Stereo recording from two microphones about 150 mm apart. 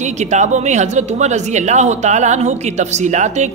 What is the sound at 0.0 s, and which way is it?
A woman's voice, 50° right (ahead or behind).